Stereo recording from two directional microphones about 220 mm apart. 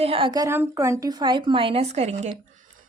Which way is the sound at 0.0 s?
25° right (ahead or behind).